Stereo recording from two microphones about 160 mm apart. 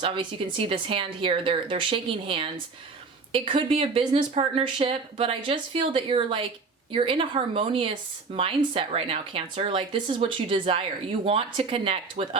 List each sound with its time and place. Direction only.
0.0 s speech: 35° right (ahead or behind)